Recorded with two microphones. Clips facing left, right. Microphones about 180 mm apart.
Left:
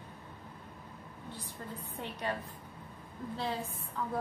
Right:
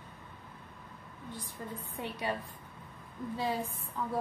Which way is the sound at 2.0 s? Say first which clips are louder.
Right 2 dB; 10° right (ahead or behind).